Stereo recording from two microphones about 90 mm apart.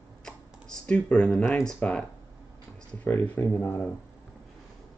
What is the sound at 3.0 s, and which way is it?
Speech, 20° left (ahead or behind).